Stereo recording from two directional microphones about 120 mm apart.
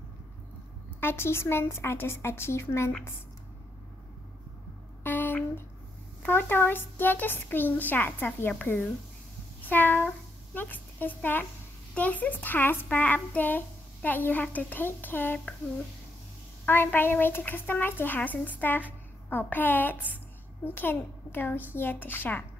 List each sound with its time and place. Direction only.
1.0 s a woman's voice: 20° left (ahead or behind)
5.0 s a sound: 15° left (ahead or behind)
6.2 s a child's voice: 15° left (ahead or behind)
16.6 s a child's voice: 15° left (ahead or behind)